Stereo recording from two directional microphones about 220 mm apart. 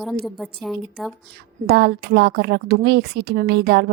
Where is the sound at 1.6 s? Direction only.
45° right (ahead or behind).